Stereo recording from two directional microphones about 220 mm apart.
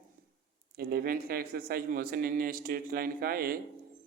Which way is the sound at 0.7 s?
45° right (ahead or behind).